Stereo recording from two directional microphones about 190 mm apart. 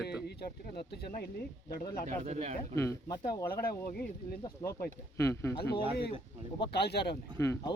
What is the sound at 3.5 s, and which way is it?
Speech, 55° left (ahead or behind).